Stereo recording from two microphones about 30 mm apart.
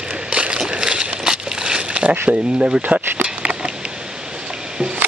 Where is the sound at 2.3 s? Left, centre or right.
Right.